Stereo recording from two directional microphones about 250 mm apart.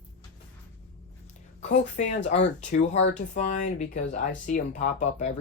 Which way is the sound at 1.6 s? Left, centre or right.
Left.